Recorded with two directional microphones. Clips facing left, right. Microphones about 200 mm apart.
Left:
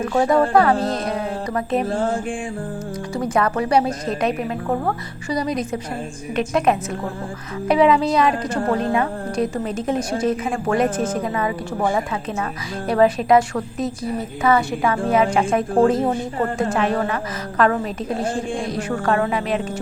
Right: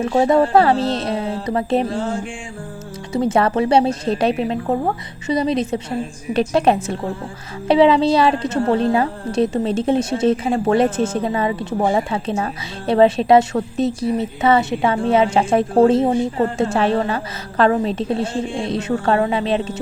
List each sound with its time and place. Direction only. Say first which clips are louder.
0.0 s a woman's voice: right 2 dB; 25° right (ahead or behind)
3.1 s a woman's voice: right 4 dB; 25° right (ahead or behind)